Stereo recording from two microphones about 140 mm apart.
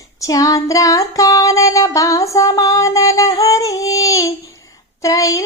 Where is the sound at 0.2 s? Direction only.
25° left (ahead or behind).